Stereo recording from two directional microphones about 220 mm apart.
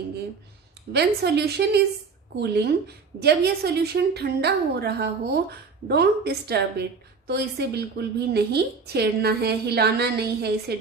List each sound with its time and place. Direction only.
0.9 s a woman's voice: 50° right (ahead or behind)